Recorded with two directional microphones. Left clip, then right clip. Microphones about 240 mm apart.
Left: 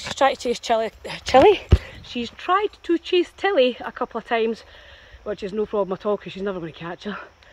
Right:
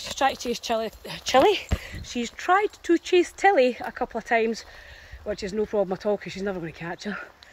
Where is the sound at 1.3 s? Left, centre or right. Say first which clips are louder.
Left 5 dB; left.